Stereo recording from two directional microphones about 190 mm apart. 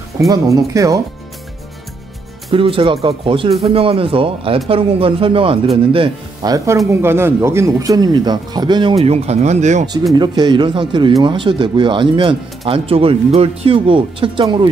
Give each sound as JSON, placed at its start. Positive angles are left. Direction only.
{"t": 0.3, "sound": "speech", "side_deg": -15}
{"t": 2.5, "sound": "speech", "side_deg": -30}
{"t": 10.1, "sound": "speech", "side_deg": -25}